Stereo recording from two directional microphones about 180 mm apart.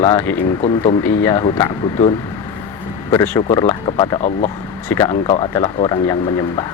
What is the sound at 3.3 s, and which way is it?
Speech, 20° left (ahead or behind).